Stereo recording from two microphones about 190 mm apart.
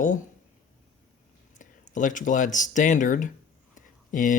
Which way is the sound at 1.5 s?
40° left (ahead or behind).